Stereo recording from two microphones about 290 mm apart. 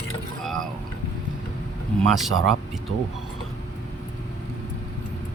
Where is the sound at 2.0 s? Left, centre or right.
Centre.